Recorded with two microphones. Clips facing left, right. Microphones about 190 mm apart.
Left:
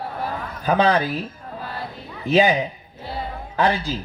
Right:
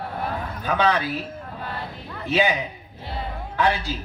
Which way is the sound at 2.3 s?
35° left (ahead or behind).